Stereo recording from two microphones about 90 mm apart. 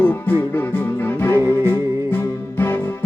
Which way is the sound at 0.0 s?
20° left (ahead or behind).